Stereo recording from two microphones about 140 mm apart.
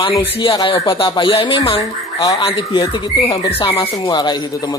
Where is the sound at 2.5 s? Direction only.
40° left (ahead or behind).